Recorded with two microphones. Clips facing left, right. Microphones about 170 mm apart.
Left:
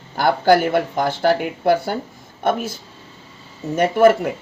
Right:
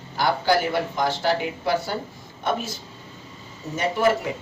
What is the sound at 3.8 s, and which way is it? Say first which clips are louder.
Speech: left 7 dB; 55° left (ahead or behind).